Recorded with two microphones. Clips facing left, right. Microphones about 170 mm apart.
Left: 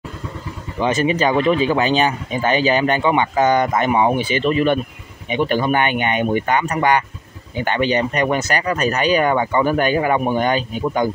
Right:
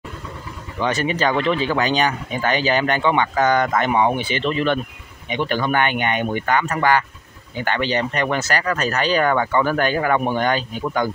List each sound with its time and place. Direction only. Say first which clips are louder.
0.7 s speech: left 3 dB; 20° left (ahead or behind)